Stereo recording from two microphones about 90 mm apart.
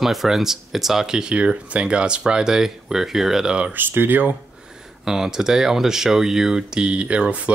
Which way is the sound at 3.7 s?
20° right (ahead or behind).